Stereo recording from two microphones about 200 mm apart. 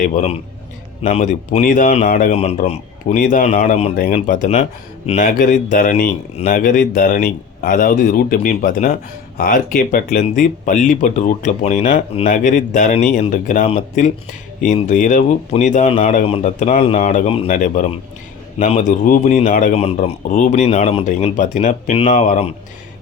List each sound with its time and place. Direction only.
0.0 s speech: 35° left (ahead or behind)
3.9 s speech: 45° left (ahead or behind)
17.5 s speech: 40° left (ahead or behind)